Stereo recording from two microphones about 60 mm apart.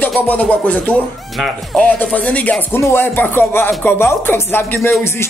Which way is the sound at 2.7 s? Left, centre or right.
Left.